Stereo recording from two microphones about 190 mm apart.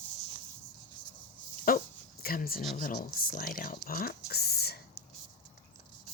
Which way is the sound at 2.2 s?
50° left (ahead or behind).